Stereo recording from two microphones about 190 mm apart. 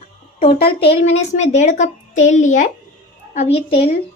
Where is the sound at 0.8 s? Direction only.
30° left (ahead or behind).